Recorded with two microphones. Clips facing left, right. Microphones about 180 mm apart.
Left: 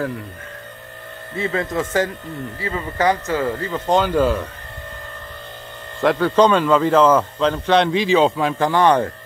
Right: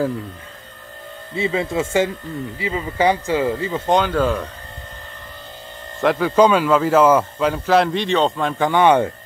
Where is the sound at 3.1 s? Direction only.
25° right (ahead or behind).